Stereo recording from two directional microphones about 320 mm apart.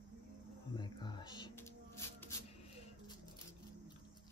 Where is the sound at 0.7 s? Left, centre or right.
Centre.